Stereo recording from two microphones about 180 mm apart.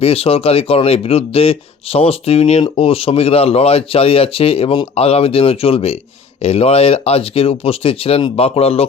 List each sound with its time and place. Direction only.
0.0 s speech: 35° left (ahead or behind)